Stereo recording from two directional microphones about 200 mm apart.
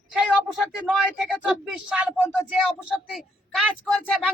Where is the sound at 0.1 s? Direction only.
5° right (ahead or behind).